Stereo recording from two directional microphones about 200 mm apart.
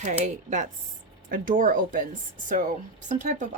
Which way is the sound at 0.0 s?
35° right (ahead or behind).